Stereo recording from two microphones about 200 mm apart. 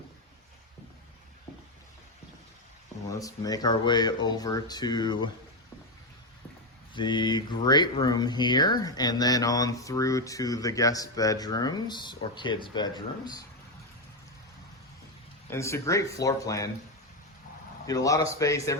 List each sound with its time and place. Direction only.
3.1 s speech: 15° left (ahead or behind)
6.9 s speech: 25° left (ahead or behind)
15.4 s speech: 15° left (ahead or behind)
17.8 s speech: 15° left (ahead or behind)